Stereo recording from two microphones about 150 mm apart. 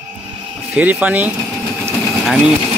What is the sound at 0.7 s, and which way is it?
Speech, 10° right (ahead or behind).